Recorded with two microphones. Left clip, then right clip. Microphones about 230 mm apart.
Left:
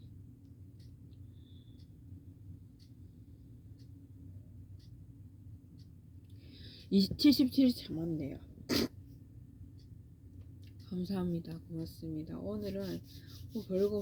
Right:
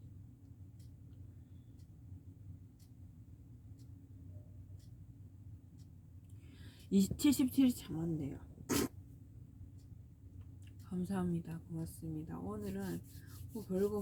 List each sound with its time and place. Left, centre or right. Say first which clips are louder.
6.5 s speech: left 3 dB; centre
8.3 s a sound: left 3 dB; centre
10.8 s a woman's voice: left 2 dB; centre